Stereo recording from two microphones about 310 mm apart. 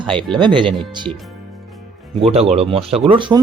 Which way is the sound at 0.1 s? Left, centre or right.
Centre.